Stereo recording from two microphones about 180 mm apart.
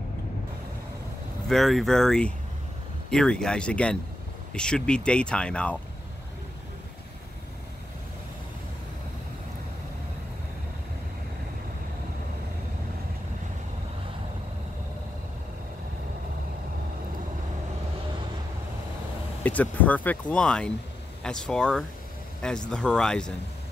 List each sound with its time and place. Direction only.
1.5 s speech: centre (ahead or behind)
19.4 s speech: 10° left (ahead or behind)